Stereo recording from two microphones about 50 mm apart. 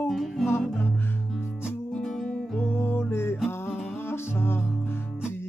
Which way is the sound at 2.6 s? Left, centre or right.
Left.